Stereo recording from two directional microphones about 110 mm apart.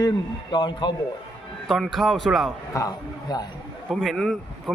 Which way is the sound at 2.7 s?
35° left (ahead or behind).